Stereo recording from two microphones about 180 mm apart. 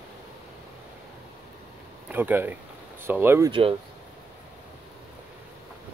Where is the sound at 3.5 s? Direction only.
30° right (ahead or behind).